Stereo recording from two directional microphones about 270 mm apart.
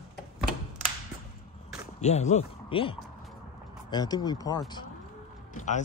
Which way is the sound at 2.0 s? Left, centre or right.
Left.